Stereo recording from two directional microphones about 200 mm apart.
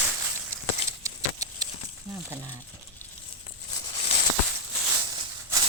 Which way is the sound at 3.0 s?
10° left (ahead or behind).